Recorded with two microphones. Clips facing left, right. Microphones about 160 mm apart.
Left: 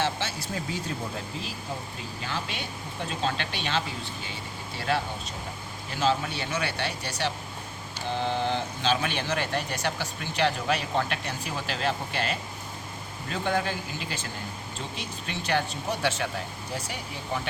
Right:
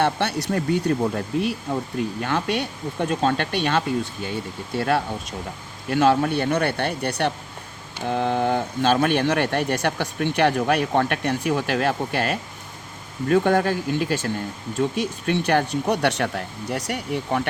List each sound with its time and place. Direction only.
0.0 s speech: 65° right (ahead or behind)